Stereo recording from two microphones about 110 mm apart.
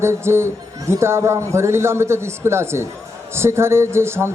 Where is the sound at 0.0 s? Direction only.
25° right (ahead or behind).